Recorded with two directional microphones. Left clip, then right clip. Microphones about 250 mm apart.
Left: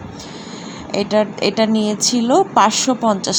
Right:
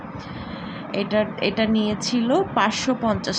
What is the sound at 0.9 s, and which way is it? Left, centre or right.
Speech, centre.